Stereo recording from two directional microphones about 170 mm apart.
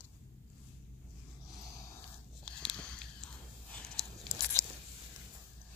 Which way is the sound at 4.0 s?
20° right (ahead or behind).